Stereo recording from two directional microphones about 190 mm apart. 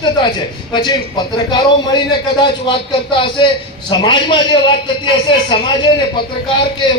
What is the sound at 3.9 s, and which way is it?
A man's voice, 25° left (ahead or behind).